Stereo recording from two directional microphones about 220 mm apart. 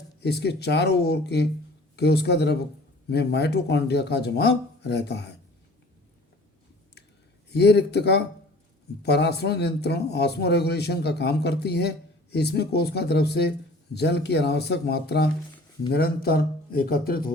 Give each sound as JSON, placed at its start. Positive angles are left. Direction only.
{"t": 0.2, "sound": "a man's voice", "side_deg": 50}
{"t": 7.5, "sound": "a man's voice", "side_deg": 50}